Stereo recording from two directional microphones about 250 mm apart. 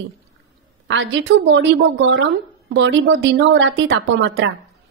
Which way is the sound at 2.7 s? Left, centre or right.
Right.